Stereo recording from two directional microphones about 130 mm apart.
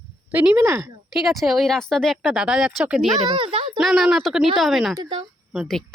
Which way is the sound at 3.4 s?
45° right (ahead or behind).